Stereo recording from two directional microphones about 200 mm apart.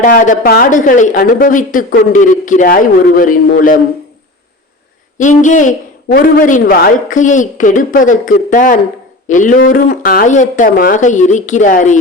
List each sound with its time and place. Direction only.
0.0 s speech: 45° left (ahead or behind)
5.1 s speech: 40° left (ahead or behind)